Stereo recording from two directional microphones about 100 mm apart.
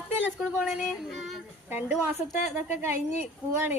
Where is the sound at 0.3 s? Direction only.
10° right (ahead or behind).